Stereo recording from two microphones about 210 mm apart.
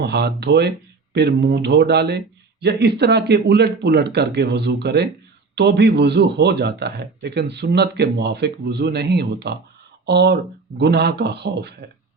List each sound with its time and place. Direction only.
0.0 s speech: 50° right (ahead or behind)